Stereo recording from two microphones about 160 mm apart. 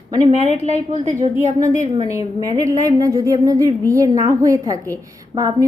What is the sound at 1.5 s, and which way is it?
A woman's voice, 20° right (ahead or behind).